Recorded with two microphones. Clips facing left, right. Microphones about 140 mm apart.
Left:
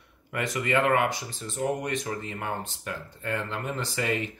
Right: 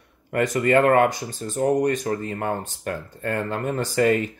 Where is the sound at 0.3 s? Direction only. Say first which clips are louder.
Right 8 dB; 45° right (ahead or behind).